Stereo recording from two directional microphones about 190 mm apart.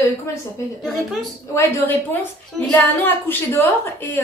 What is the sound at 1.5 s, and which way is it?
A woman's voice, 15° left (ahead or behind).